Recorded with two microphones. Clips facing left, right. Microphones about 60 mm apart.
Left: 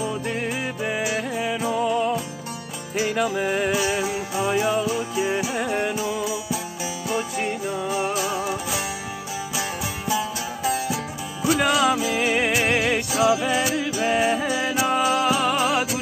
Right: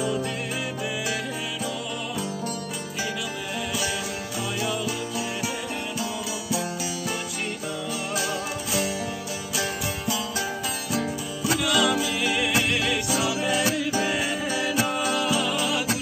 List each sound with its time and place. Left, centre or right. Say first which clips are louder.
1.6 s music: left 9 dB; left
3.2 s music: left 9 dB; left
3.8 s music: left 5 dB; left
7.9 s music: left 5 dB; left
9.6 s music: right 2 dB; left
11.4 s music: left 4 dB; left